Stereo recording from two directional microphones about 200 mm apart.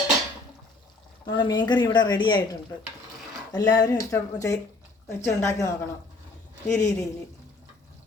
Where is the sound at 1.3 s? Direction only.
20° left (ahead or behind).